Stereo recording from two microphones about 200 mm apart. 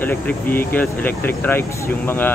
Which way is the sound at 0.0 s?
10° left (ahead or behind).